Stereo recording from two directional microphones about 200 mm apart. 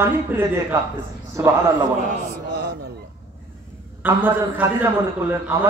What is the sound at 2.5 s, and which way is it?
Speech, 55° right (ahead or behind).